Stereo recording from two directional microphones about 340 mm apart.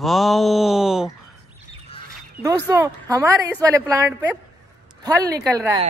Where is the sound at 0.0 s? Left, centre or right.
Centre.